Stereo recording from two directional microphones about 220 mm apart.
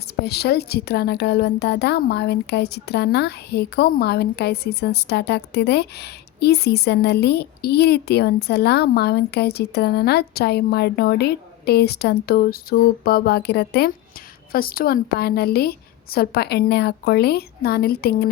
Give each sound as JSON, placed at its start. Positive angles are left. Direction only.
{"t": 0.2, "sound": "a woman's voice", "side_deg": 50}